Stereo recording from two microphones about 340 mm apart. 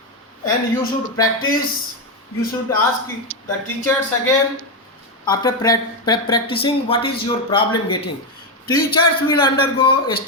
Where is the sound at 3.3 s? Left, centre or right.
Right.